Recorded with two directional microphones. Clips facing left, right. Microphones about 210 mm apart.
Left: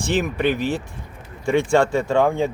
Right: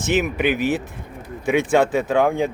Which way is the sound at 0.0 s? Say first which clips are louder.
Right 1 dB; 20° right (ahead or behind).